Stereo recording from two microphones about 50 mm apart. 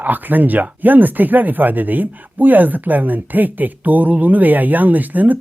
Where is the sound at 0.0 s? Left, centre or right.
Right.